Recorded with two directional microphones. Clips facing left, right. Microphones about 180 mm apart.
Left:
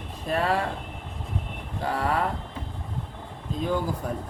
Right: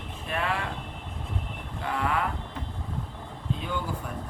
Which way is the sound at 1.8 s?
35° left (ahead or behind).